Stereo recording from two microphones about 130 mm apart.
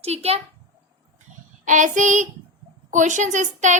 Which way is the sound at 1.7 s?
75° right (ahead or behind).